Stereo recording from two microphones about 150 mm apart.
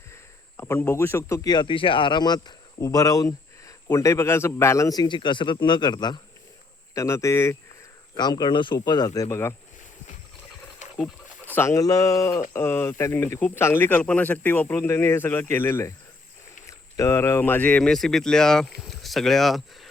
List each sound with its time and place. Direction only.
0.1 s speech: 15° left (ahead or behind)
11.5 s speech: 20° left (ahead or behind); by 19.9 s centre (ahead or behind)